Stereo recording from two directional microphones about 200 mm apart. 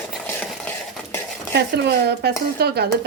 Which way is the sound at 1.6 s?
55° right (ahead or behind).